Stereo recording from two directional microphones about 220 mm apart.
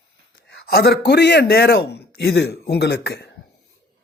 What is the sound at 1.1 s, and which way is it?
A woman's voice, 50° left (ahead or behind).